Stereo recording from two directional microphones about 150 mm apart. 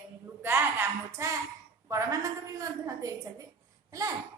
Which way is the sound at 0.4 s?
15° right (ahead or behind).